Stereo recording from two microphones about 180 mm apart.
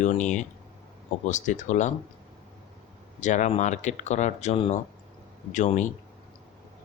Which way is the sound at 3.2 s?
40° left (ahead or behind).